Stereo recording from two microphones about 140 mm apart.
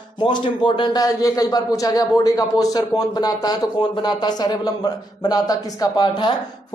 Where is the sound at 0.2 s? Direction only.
35° left (ahead or behind).